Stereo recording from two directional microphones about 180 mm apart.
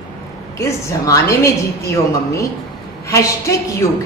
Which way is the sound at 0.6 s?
15° left (ahead or behind).